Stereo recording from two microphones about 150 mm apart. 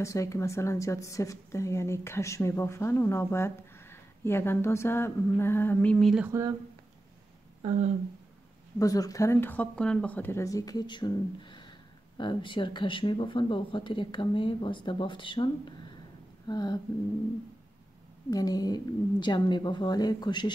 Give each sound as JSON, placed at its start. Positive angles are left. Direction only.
{"t": 0.0, "sound": "a woman's voice", "side_deg": 20}
{"t": 6.2, "sound": "speech", "side_deg": -20}
{"t": 8.7, "sound": "speech", "side_deg": 25}
{"t": 18.3, "sound": "speech", "side_deg": 25}